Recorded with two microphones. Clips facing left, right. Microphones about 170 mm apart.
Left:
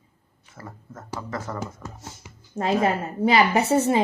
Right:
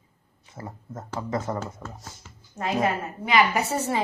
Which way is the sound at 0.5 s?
20° right (ahead or behind).